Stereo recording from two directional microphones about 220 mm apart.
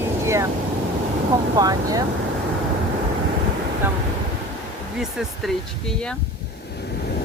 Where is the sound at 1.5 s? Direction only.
15° right (ahead or behind).